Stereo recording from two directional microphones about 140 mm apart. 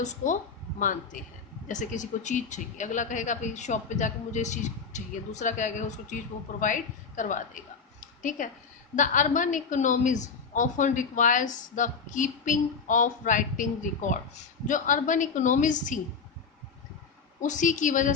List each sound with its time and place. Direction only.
0.0 s a woman's voice: 60° left (ahead or behind)
0.8 s a woman's voice: 70° left (ahead or behind)
8.0 s a sound: 65° left (ahead or behind)
9.0 s a woman's voice: 65° left (ahead or behind)
17.4 s a woman's voice: 65° left (ahead or behind)